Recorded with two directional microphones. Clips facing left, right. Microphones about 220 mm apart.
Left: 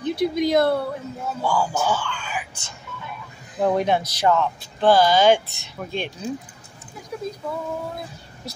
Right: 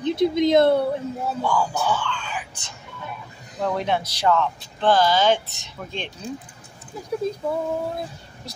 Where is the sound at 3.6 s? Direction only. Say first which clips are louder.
Left 4 dB; 15° left (ahead or behind).